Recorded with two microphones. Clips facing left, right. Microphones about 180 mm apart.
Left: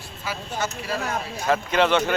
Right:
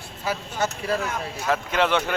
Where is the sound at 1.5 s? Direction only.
5° right (ahead or behind).